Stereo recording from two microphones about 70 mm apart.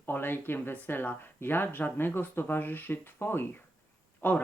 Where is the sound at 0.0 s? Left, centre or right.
Left.